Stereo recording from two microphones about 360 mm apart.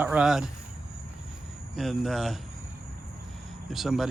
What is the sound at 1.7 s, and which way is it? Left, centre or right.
Speech, centre.